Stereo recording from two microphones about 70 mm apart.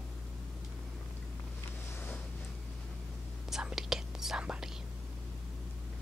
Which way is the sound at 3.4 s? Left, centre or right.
Centre.